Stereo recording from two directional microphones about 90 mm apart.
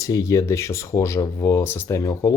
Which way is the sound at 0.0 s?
40° left (ahead or behind).